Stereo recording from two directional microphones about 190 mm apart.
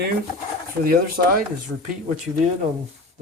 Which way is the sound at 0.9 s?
50° right (ahead or behind).